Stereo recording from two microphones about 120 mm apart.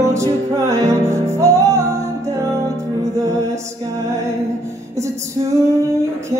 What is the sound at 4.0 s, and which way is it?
Music, 25° right (ahead or behind).